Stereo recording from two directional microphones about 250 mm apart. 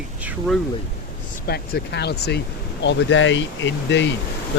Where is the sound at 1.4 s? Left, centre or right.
Left.